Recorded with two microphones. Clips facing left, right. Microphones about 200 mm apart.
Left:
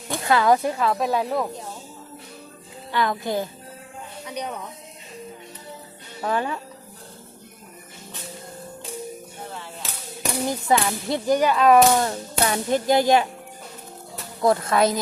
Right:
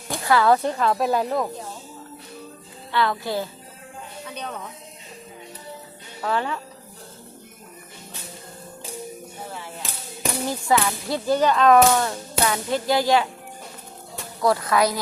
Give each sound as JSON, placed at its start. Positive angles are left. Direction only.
{"t": 0.1, "sound": "speech", "side_deg": 20}
{"t": 2.9, "sound": "speech", "side_deg": 15}
{"t": 6.2, "sound": "speech", "side_deg": 15}
{"t": 10.4, "sound": "speech", "side_deg": 20}
{"t": 11.9, "sound": "music", "side_deg": 25}
{"t": 14.4, "sound": "music", "side_deg": 25}